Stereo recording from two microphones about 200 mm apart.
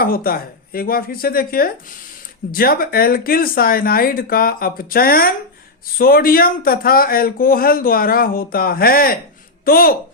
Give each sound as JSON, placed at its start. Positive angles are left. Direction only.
{"t": 0.0, "sound": "speech", "side_deg": 45}